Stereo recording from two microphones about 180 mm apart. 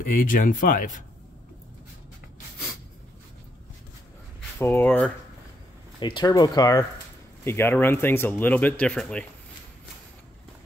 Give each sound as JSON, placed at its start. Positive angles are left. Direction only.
{"t": 0.1, "sound": "speech", "side_deg": 50}
{"t": 4.6, "sound": "speech", "side_deg": 10}
{"t": 5.9, "sound": "speech", "side_deg": 25}